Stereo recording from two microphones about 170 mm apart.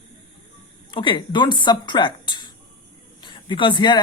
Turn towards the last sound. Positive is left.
turn(degrees=25)  # may be behind; listen again after turning